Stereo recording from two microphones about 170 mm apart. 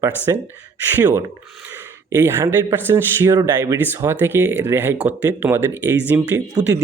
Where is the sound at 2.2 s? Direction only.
15° right (ahead or behind).